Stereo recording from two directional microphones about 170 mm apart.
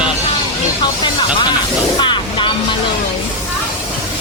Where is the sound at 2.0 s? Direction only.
25° left (ahead or behind).